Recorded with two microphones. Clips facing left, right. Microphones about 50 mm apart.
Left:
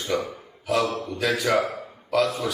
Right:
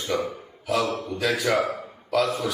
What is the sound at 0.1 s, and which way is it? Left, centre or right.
A man's voice, centre.